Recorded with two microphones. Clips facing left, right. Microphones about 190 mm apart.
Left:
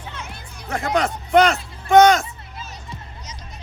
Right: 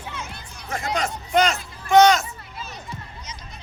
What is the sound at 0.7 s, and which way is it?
Speech, 60° left (ahead or behind).